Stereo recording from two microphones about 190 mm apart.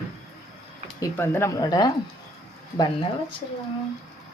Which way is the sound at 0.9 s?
10° left (ahead or behind).